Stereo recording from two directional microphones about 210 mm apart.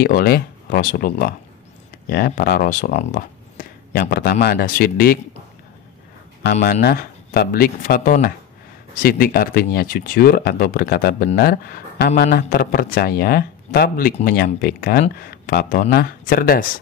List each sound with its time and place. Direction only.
0.0 s speech: 45° left (ahead or behind)
6.6 s speech: 45° left (ahead or behind)